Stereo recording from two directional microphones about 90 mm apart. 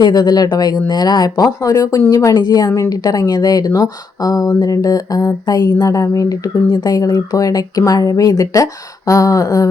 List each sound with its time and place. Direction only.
0.0 s speech: 50° left (ahead or behind)